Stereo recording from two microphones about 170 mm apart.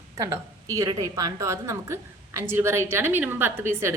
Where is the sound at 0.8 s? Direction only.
20° right (ahead or behind).